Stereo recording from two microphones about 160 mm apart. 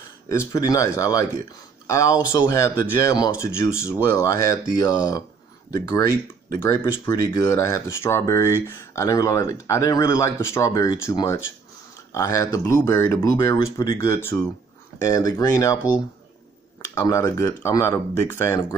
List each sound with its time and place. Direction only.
0.3 s speech: 20° left (ahead or behind)
16.9 s speech: 20° left (ahead or behind)